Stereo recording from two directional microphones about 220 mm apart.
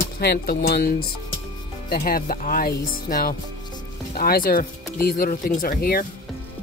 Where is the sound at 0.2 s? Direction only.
45° left (ahead or behind).